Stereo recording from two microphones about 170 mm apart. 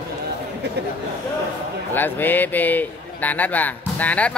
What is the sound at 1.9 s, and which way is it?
Speech, 10° left (ahead or behind).